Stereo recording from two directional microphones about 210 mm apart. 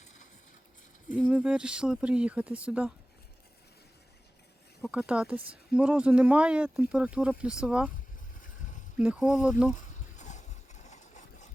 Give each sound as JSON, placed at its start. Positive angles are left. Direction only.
{"t": 1.1, "sound": "speech", "side_deg": -5}
{"t": 4.8, "sound": "speech", "side_deg": -5}
{"t": 9.0, "sound": "speech", "side_deg": -5}
{"t": 10.2, "sound": "a sound", "side_deg": 35}